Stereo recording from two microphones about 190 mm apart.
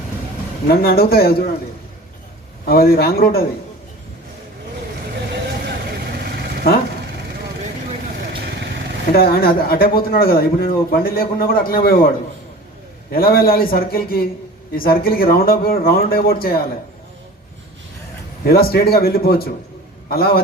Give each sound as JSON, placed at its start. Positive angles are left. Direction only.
{"t": 0.7, "sound": "speech", "side_deg": 50}
{"t": 2.6, "sound": "speech", "side_deg": 50}
{"t": 5.3, "sound": "vehicle", "side_deg": -60}
{"t": 9.1, "sound": "speech", "side_deg": 50}
{"t": 18.4, "sound": "speech", "side_deg": 55}